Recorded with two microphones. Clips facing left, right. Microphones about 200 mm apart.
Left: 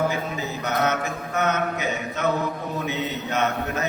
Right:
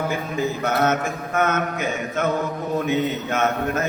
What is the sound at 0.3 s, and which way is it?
A man's voice, 50° right (ahead or behind).